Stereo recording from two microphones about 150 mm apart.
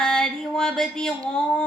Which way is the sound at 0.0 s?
5° left (ahead or behind).